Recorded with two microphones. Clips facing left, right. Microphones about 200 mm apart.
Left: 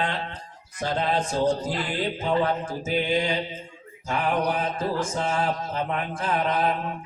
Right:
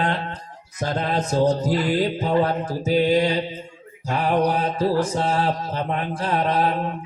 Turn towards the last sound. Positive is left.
turn(degrees=-35)  # may be behind; listen again after turning